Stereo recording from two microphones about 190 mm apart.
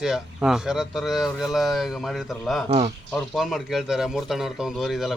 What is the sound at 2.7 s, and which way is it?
Speech, 30° right (ahead or behind).